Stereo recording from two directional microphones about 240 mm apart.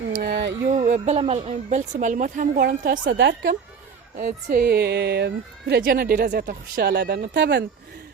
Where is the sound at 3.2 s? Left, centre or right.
Right.